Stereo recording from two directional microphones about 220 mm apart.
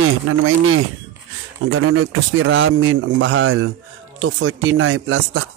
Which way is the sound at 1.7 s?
70° right (ahead or behind).